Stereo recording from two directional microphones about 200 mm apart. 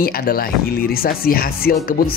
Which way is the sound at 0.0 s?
45° left (ahead or behind).